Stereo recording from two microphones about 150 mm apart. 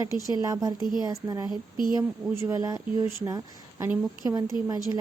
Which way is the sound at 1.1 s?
25° right (ahead or behind).